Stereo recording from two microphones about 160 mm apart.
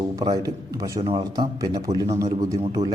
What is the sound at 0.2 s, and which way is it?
A man's voice, 20° right (ahead or behind).